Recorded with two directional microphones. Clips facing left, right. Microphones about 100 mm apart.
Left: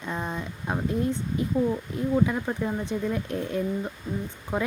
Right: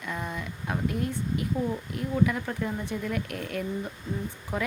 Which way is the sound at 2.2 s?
25° left (ahead or behind).